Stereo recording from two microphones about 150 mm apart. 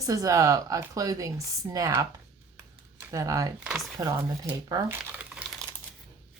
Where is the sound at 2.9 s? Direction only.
20° right (ahead or behind).